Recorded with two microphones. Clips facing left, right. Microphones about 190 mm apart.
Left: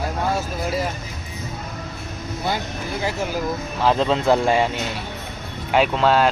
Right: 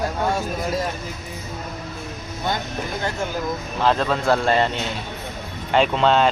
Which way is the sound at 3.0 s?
10° left (ahead or behind).